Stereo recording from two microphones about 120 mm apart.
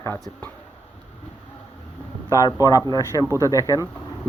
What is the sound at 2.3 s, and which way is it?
Speech, 30° left (ahead or behind).